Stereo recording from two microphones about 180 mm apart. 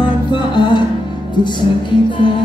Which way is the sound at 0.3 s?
25° left (ahead or behind).